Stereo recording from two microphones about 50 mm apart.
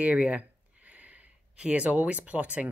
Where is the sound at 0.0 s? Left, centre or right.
Right.